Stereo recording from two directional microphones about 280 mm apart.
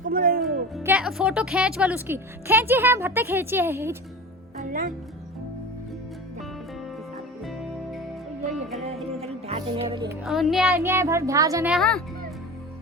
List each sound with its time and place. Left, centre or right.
0.0 s music: right
0.4 s speech: centre
4.6 s music: right
9.2 s music: centre
10.2 s a child's voice: centre